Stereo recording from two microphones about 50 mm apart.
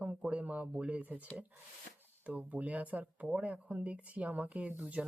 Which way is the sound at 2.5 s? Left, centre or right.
Right.